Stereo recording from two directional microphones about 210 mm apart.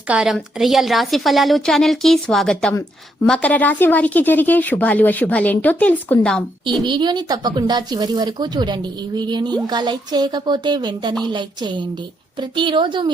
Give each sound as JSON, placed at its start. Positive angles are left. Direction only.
{"t": 0.1, "sound": "a woman's voice", "side_deg": 0}
{"t": 6.8, "sound": "speech", "side_deg": -20}